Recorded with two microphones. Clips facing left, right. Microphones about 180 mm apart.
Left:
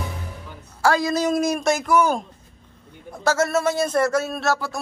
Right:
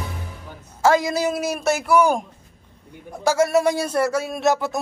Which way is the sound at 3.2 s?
10° right (ahead or behind).